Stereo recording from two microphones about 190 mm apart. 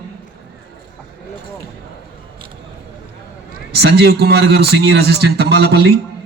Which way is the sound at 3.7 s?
60° right (ahead or behind).